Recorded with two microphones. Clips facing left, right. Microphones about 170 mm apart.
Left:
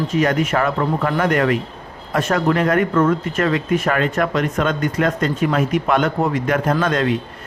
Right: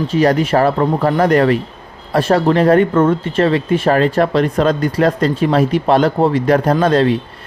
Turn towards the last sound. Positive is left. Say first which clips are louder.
# right 5 dB
turn(degrees=-30)  # may be behind; listen again after turning